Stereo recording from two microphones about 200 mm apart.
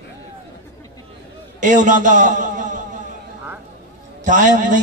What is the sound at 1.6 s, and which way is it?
A man's voice, 40° right (ahead or behind).